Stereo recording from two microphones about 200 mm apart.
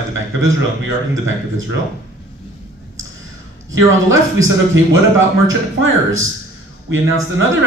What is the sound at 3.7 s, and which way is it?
Speech, 75° right (ahead or behind).